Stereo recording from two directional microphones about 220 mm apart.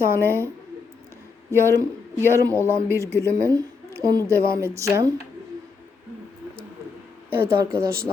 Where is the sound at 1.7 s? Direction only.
10° right (ahead or behind).